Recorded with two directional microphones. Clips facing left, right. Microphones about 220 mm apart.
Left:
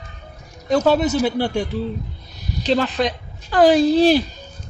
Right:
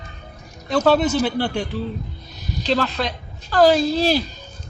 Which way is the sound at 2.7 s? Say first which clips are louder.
Left 3 dB; 15° left (ahead or behind).